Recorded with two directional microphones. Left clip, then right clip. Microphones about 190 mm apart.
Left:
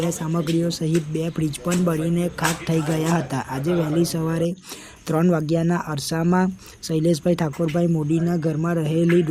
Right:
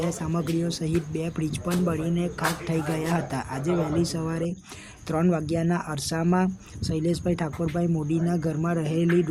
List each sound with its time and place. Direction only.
0.1 s speech: 15° left (ahead or behind)